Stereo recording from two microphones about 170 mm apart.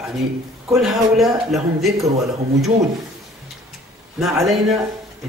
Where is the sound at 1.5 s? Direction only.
Centre (ahead or behind).